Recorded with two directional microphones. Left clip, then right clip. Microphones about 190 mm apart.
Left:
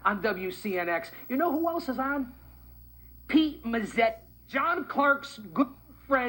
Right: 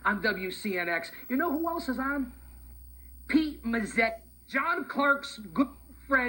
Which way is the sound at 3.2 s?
15° right (ahead or behind).